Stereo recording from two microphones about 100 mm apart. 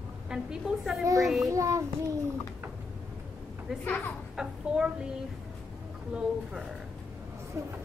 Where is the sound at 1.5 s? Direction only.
30° right (ahead or behind).